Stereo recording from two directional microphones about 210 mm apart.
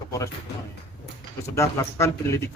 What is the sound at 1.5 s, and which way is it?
Speech, 15° left (ahead or behind).